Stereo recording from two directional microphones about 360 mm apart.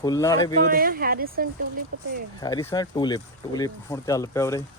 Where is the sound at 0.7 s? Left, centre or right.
Right.